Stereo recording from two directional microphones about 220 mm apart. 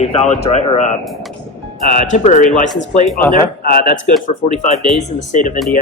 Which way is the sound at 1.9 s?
35° left (ahead or behind).